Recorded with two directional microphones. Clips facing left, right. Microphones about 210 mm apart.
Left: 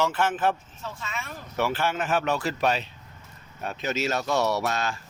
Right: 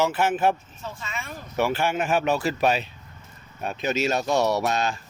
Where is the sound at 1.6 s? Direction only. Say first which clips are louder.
Right 3 dB; 15° right (ahead or behind).